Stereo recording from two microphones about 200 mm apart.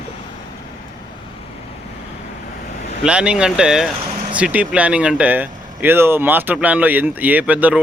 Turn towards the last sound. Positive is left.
turn(degrees=-5)  # may be behind; listen again after turning